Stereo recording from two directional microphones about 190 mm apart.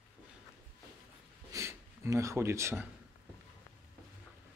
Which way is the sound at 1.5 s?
15° right (ahead or behind).